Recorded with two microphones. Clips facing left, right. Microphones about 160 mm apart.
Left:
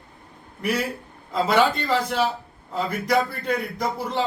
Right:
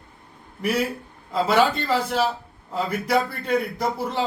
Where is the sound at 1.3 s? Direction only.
5° right (ahead or behind).